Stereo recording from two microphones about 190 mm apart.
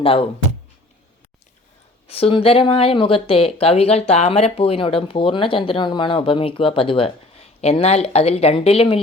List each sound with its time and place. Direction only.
0.0 s speech: 30° left (ahead or behind)
2.0 s speech: 30° left (ahead or behind)